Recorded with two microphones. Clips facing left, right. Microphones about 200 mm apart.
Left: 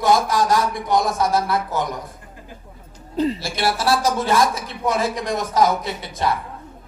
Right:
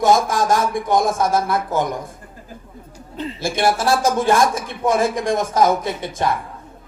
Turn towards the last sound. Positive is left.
turn(degrees=-50)  # may be behind; listen again after turning